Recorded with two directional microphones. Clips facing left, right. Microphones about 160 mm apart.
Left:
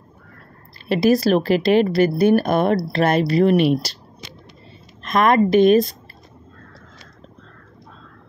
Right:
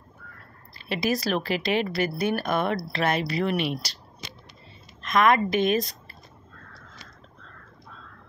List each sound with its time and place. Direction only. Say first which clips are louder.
0.8 s speech: left 10 dB; 35° left (ahead or behind)
5.0 s a sound: left 3 dB; 50° left (ahead or behind)
5.3 s speech: left 9 dB; 35° left (ahead or behind)